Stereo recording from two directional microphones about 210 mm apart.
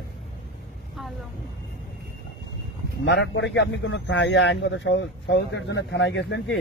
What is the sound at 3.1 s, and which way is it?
A man's voice, 60° left (ahead or behind).